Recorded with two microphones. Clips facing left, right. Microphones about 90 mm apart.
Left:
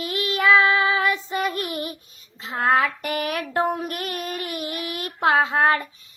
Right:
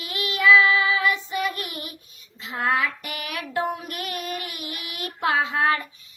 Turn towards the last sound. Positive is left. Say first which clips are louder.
# left 3 dB
turn(degrees=35)  # may be behind; listen again after turning